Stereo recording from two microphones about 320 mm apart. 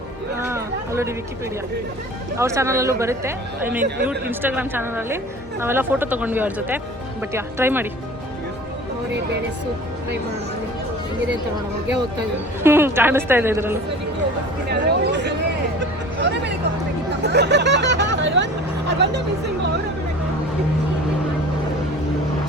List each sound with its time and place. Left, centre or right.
0.4 s a sound: centre
2.4 s a woman's voice: centre
12.6 s a woman's voice: centre
14.7 s speech: right
15.8 s hubbub: right
17.2 s a sound: right
18.9 s speech: right